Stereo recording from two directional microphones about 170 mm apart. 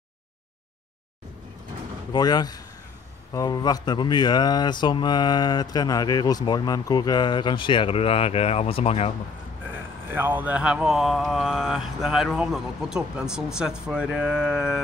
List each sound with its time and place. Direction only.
2.1 s speech: 25° left (ahead or behind)
10.1 s speech: 10° right (ahead or behind)